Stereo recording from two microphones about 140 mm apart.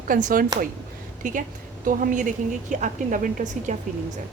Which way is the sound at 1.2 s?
65° right (ahead or behind).